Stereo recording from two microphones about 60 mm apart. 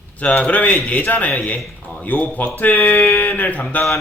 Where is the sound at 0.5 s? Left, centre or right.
Left.